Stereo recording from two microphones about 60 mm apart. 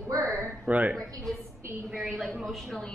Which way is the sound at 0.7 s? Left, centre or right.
Right.